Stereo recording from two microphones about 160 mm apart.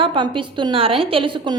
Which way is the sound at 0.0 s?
30° right (ahead or behind).